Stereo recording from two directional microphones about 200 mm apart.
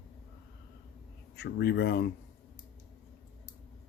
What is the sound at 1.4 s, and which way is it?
Speech, 55° left (ahead or behind).